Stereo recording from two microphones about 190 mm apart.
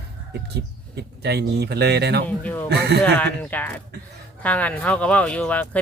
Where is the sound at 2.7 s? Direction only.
60° right (ahead or behind).